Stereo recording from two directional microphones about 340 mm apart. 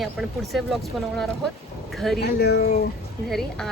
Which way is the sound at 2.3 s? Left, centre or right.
Left.